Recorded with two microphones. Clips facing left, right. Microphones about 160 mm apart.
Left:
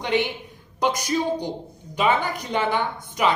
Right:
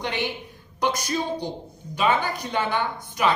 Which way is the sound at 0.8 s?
15° left (ahead or behind).